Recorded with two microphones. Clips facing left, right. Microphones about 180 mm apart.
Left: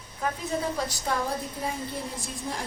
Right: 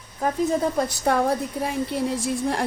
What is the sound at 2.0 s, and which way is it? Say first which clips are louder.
Speech: right 11 dB; 75° right (ahead or behind).